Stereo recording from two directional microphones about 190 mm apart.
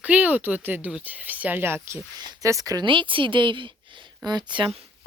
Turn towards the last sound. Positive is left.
turn(degrees=-25)  # may be behind; listen again after turning